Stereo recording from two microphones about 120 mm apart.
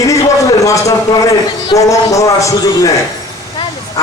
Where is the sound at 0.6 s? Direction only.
25° left (ahead or behind).